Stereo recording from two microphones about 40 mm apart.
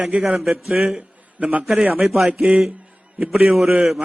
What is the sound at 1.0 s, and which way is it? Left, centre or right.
Speech, right.